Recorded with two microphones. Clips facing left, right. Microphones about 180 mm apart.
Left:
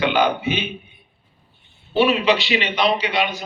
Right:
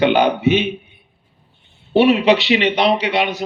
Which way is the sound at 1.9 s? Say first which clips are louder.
Right 5 dB; 65° right (ahead or behind).